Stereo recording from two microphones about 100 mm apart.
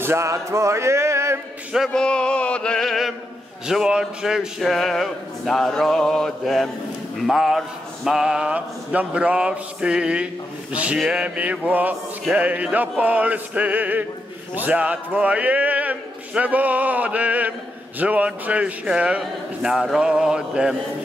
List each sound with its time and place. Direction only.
0.0 s music: 25° right (ahead or behind)
1.9 s chant: 10° left (ahead or behind)
3.6 s a man's voice: 5° right (ahead or behind)